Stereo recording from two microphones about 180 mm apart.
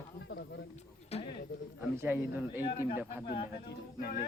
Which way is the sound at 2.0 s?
10° right (ahead or behind).